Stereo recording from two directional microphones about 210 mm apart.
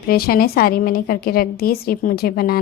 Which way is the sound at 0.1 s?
45° left (ahead or behind).